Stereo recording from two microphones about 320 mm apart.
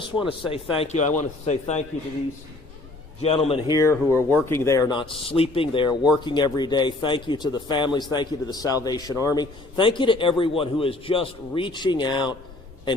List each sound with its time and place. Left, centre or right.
0.0 s a man's voice: centre
3.2 s a man's voice: centre
4.1 s speech: centre
4.4 s a man's voice: centre